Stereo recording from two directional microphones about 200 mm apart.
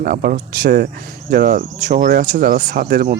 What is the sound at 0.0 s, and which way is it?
Speech, 50° right (ahead or behind).